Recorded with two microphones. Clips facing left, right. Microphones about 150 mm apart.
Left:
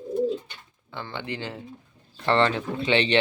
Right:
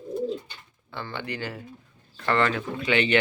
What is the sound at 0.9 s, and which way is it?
Speech, 15° left (ahead or behind).